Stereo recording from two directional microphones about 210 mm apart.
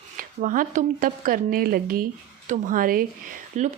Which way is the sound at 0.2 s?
40° right (ahead or behind).